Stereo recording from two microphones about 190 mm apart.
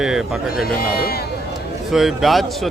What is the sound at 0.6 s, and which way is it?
Speech, 55° left (ahead or behind).